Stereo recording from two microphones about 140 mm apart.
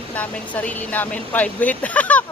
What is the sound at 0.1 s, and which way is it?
A woman's voice, 10° left (ahead or behind).